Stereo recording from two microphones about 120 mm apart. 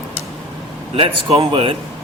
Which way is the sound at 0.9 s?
50° right (ahead or behind).